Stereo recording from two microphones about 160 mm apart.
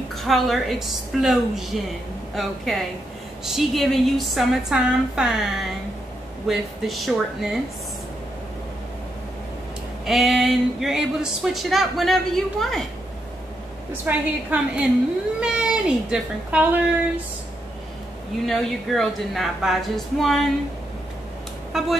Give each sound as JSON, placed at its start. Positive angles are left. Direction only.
{"t": 0.1, "sound": "speech", "side_deg": 0}
{"t": 10.0, "sound": "speech", "side_deg": 0}
{"t": 14.0, "sound": "a woman's voice", "side_deg": -10}
{"t": 18.4, "sound": "speech", "side_deg": 0}
{"t": 21.7, "sound": "speech", "side_deg": 0}